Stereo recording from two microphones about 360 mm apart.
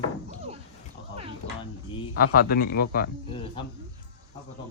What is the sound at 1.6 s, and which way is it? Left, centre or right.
Speech, centre.